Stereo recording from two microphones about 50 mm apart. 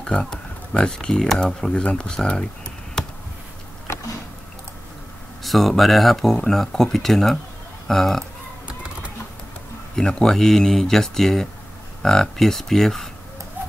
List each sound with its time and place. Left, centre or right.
0.0 s speech: centre
1.7 s speech: centre
3.0 s a sound: centre
5.4 s speech: centre
9.9 s speech: centre